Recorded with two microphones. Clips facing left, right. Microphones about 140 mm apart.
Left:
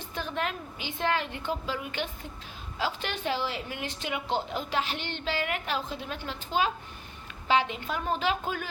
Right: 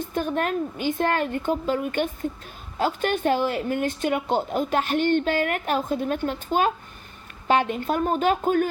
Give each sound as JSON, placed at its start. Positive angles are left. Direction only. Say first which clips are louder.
{"t": 0.0, "sound": "a woman's voice", "louder": "right 8 dB", "side_deg": -50}